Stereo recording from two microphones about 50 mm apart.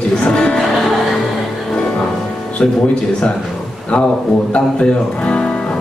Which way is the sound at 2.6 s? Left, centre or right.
Left.